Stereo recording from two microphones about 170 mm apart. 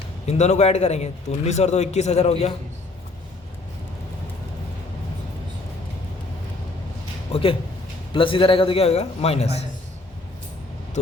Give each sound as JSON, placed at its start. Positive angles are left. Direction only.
{"t": 0.3, "sound": "a man's voice", "side_deg": 40}
{"t": 8.1, "sound": "a man's voice", "side_deg": 30}
{"t": 11.0, "sound": "a man's voice", "side_deg": 40}